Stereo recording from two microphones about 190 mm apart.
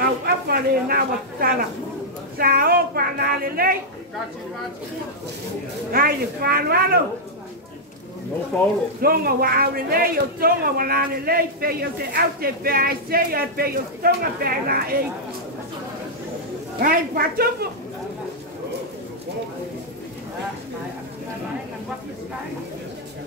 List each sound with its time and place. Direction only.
0.2 s a man's voice: 50° right (ahead or behind)
5.9 s a man's voice: 50° right (ahead or behind)
8.5 s speech: 10° left (ahead or behind)
9.0 s a man's voice: 50° right (ahead or behind)
16.8 s a man's voice: 50° right (ahead or behind)